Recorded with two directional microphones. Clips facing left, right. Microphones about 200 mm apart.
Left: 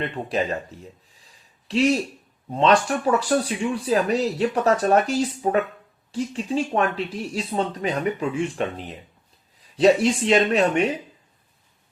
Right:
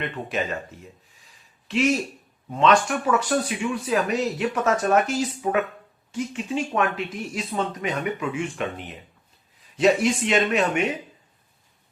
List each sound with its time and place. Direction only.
0.0 s speech: 35° left (ahead or behind)
1.6 s speech: 35° left (ahead or behind)